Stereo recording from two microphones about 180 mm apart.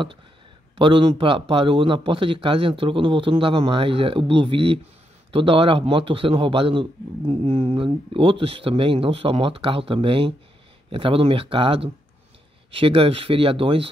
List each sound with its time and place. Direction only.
0.7 s a man's voice: 30° right (ahead or behind)